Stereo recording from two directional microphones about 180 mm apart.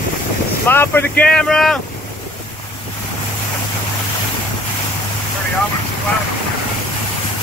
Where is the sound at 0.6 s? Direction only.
10° left (ahead or behind).